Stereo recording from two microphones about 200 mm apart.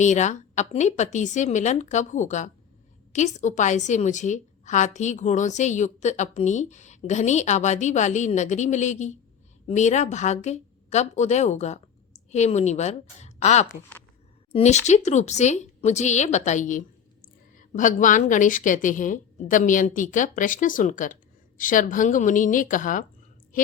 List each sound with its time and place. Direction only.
0.0 s a woman's voice: 35° left (ahead or behind)